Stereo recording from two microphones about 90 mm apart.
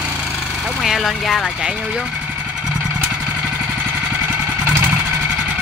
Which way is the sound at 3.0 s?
15° right (ahead or behind).